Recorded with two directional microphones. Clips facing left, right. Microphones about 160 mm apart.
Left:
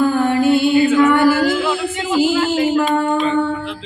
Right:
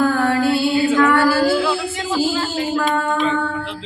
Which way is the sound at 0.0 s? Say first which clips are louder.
Left 2 dB; 20° left (ahead or behind).